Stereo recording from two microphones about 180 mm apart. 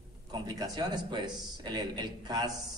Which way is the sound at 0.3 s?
20° right (ahead or behind).